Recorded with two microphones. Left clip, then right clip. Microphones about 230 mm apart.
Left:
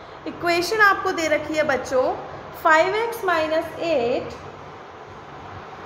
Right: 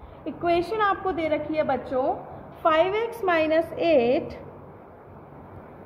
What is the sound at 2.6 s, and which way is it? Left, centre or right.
Speech, right.